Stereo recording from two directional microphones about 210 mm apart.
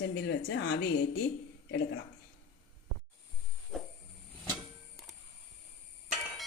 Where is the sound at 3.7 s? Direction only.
Centre (ahead or behind).